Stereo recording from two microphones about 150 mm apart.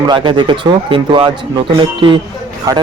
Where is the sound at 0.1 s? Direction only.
30° right (ahead or behind).